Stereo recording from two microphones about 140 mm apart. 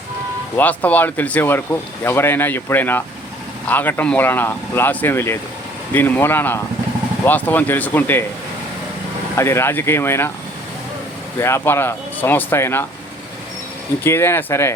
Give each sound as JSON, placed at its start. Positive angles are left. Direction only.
{"t": 0.5, "sound": "speech", "side_deg": 10}
{"t": 9.3, "sound": "speech", "side_deg": 20}
{"t": 11.3, "sound": "speech", "side_deg": 20}
{"t": 14.0, "sound": "speech", "side_deg": 15}